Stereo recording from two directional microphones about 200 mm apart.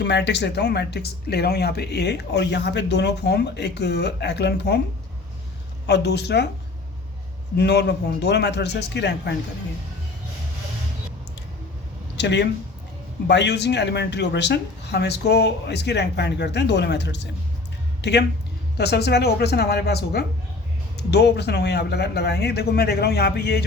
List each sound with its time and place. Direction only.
0.0 s speech: 60° left (ahead or behind)
5.8 s speech: 55° left (ahead or behind)
7.5 s speech: 55° left (ahead or behind)
12.1 s speech: 60° left (ahead or behind)